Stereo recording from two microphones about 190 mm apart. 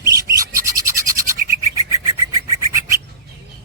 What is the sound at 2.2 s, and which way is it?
Bird, 15° right (ahead or behind).